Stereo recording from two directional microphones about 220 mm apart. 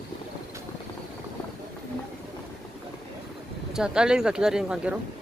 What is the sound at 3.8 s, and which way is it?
Speech, 5° right (ahead or behind).